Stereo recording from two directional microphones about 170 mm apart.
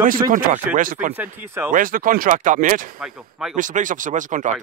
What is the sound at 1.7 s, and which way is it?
Speech, 55° right (ahead or behind).